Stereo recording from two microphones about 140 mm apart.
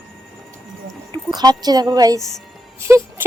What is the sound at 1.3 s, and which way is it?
Speech, 30° right (ahead or behind).